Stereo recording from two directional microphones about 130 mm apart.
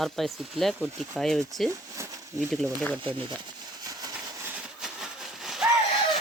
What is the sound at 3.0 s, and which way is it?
Speech, 40° right (ahead or behind).